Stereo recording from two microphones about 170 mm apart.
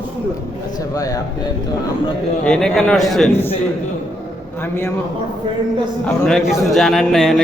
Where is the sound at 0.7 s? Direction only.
20° left (ahead or behind).